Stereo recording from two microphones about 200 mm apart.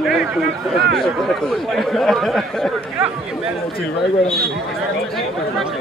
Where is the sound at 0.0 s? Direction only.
Centre (ahead or behind).